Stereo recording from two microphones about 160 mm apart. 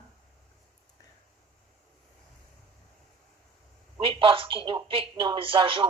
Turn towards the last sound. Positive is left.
turn(degrees=-35)  # may be behind; listen again after turning